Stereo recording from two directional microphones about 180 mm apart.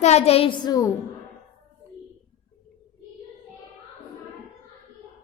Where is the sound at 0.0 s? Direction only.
35° left (ahead or behind); by 0.9 s 20° left (ahead or behind).